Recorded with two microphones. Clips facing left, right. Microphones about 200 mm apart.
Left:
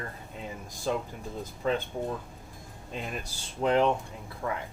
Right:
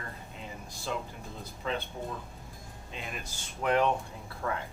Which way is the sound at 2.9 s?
45° left (ahead or behind).